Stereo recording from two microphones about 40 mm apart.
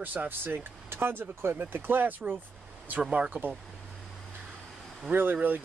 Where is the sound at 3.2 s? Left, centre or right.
Right.